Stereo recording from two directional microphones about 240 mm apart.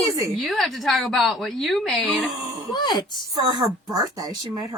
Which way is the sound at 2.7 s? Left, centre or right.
Centre.